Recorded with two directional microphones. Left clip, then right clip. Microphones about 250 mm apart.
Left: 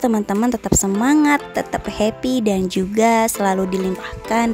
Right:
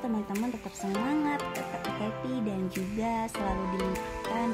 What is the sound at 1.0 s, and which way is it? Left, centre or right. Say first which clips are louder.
Speech: left 14 dB; left.